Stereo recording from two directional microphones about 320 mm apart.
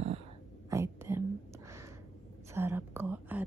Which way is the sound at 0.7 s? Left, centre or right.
Centre.